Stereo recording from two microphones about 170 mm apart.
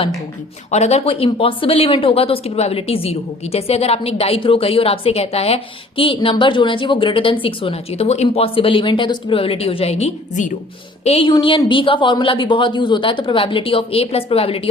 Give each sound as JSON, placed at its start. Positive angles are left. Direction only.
{"t": 0.7, "sound": "speech", "side_deg": 40}
{"t": 11.0, "sound": "speech", "side_deg": 35}